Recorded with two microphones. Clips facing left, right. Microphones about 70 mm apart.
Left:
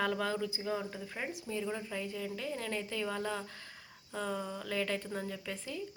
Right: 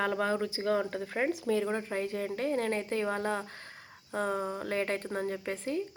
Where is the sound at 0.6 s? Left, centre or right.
Right.